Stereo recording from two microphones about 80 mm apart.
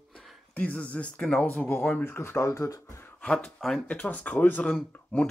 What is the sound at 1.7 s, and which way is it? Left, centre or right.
Speech, centre.